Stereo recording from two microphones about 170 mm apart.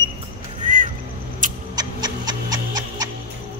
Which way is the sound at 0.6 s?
50° right (ahead or behind).